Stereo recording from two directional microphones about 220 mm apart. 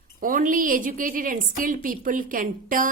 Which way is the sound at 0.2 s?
40° right (ahead or behind).